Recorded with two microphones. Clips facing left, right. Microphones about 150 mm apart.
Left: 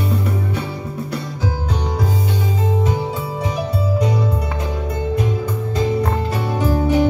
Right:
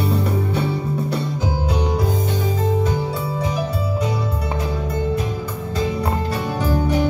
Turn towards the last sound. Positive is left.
turn(degrees=15)  # may be behind; listen again after turning